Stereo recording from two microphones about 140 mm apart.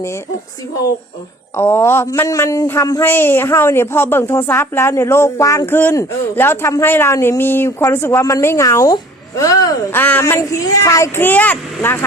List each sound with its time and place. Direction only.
1.5 s speech: 15° left (ahead or behind)
9.9 s speech: 15° left (ahead or behind)